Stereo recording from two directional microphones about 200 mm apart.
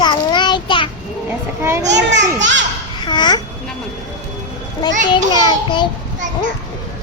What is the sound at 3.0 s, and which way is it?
Speech, 20° left (ahead or behind).